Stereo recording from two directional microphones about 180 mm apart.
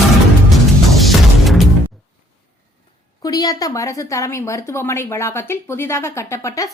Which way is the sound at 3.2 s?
20° left (ahead or behind).